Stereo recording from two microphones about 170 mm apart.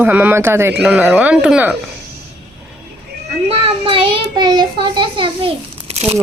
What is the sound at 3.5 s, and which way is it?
A child's voice, 35° right (ahead or behind).